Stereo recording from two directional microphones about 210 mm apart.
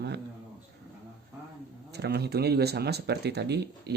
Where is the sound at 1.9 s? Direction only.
50° right (ahead or behind).